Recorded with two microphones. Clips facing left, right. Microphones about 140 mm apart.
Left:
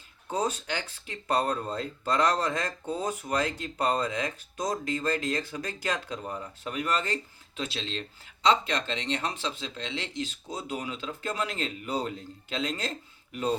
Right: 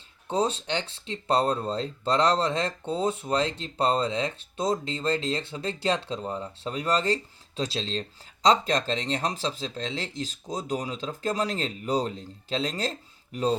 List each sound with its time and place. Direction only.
0.3 s speech: 30° right (ahead or behind)